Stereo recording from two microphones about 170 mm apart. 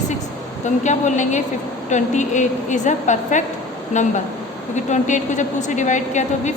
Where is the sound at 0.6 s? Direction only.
45° left (ahead or behind).